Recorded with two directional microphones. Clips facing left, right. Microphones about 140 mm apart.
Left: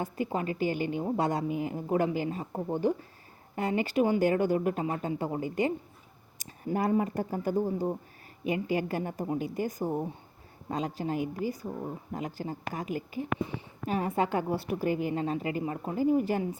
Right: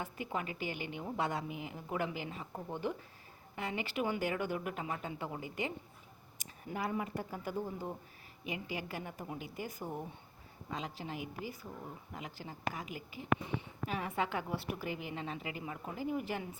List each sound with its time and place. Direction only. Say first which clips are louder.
0.0 s a woman's voice: left 8 dB; 35° left (ahead or behind)
8.4 s a woman's voice: left 11 dB; 50° left (ahead or behind)